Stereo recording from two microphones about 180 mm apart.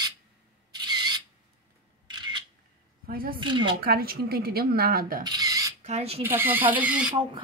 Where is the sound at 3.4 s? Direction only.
25° right (ahead or behind).